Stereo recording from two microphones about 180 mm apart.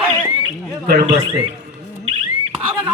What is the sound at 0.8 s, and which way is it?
Speech, 60° right (ahead or behind).